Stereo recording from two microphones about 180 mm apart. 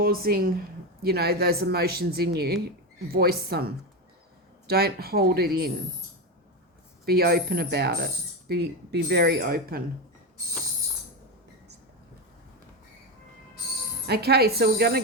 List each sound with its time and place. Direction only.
0.0 s speech: 55° right (ahead or behind)
7.0 s speech: 60° right (ahead or behind)
14.1 s speech: 60° right (ahead or behind)